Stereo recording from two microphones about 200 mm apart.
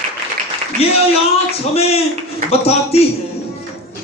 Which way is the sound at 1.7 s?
30° left (ahead or behind).